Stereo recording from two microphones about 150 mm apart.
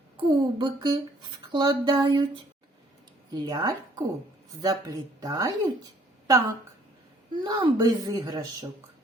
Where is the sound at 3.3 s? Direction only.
25° right (ahead or behind).